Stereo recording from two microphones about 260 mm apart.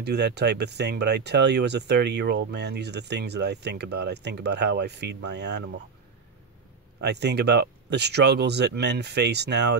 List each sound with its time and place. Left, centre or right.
0.0 s speech: right
7.0 s speech: right